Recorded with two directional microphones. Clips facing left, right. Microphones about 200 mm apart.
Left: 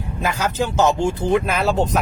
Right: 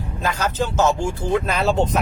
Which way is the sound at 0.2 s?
10° left (ahead or behind).